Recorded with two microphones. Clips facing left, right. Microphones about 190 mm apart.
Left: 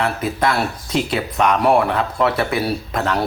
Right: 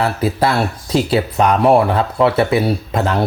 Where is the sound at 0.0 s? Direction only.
30° right (ahead or behind).